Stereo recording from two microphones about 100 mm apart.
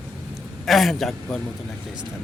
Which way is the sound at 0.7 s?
Centre (ahead or behind).